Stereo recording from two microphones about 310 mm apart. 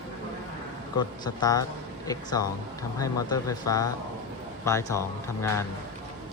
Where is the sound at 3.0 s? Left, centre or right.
Centre.